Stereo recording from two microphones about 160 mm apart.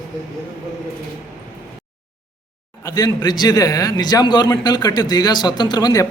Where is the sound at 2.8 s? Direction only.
25° left (ahead or behind).